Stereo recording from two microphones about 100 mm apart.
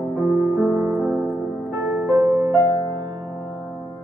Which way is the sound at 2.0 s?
35° right (ahead or behind).